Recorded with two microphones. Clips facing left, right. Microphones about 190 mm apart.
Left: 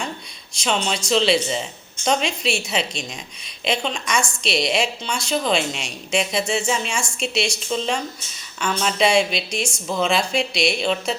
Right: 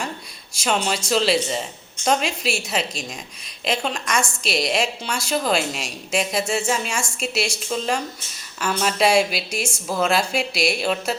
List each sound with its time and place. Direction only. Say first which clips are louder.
0.5 s a woman's voice: right 1 dB; 5° right (ahead or behind)